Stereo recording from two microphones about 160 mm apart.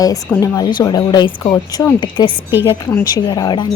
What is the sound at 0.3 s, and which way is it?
Speech, 20° left (ahead or behind).